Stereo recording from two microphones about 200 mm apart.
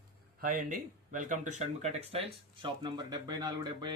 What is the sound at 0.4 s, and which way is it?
Speech, 45° right (ahead or behind).